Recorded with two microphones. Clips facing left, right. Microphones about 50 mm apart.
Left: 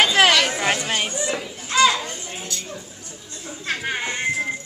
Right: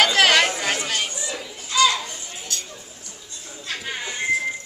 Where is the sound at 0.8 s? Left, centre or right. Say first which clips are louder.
Left 2 dB; left.